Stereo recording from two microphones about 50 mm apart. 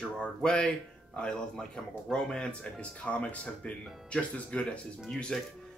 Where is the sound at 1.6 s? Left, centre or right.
Centre.